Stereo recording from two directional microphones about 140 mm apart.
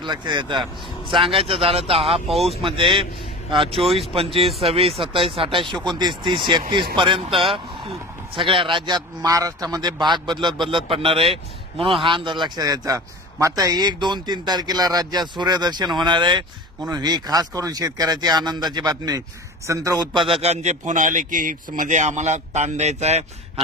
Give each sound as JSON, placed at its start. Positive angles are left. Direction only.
{"t": 0.0, "sound": "a man's voice", "side_deg": -30}
{"t": 2.2, "sound": "speech", "side_deg": 0}
{"t": 2.6, "sound": "a man's voice", "side_deg": -35}
{"t": 3.8, "sound": "speech", "side_deg": 0}
{"t": 4.1, "sound": "a man's voice", "side_deg": -45}
{"t": 20.2, "sound": "a man's voice", "side_deg": -40}